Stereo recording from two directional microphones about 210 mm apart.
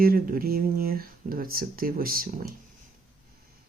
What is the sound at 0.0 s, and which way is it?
Speech, 45° right (ahead or behind).